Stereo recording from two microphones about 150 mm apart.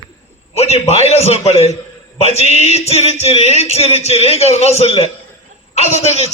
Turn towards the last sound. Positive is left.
turn(degrees=45)  # may be behind; listen again after turning